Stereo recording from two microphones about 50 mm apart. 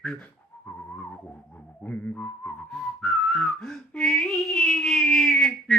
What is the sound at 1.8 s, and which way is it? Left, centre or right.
Whistling, left.